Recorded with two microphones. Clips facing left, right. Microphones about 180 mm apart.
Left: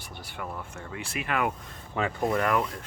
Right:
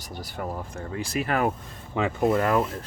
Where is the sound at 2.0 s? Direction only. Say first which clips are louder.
Right 4 dB; 20° right (ahead or behind).